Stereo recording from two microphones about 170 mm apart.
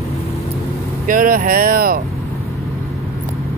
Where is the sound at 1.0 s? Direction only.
55° right (ahead or behind).